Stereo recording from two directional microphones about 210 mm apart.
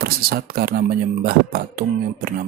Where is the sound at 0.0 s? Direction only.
45° right (ahead or behind).